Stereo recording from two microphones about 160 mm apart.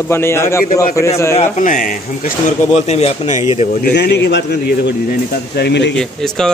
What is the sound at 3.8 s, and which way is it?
Speech, 85° left.